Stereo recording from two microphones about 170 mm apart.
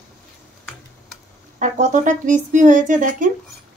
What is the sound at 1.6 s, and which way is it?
Speech, 45° right (ahead or behind).